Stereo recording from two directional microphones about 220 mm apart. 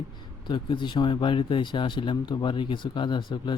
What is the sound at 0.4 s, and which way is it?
Speech, 20° left (ahead or behind).